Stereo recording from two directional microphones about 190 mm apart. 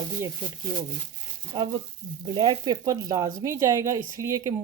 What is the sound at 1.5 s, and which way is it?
Speech, 20° right (ahead or behind).